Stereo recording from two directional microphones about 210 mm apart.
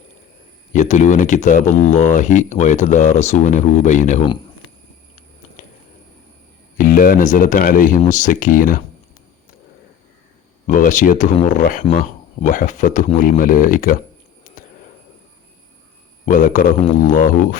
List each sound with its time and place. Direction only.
0.7 s speech: 35° left (ahead or behind)
5.6 s a sound: 40° left (ahead or behind)
6.7 s speech: 40° left (ahead or behind)
10.7 s speech: 40° left (ahead or behind)
14.5 s a sound: 35° left (ahead or behind)
16.2 s speech: 40° left (ahead or behind)